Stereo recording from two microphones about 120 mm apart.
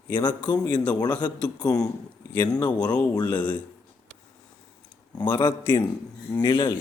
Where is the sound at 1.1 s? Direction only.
10° left (ahead or behind).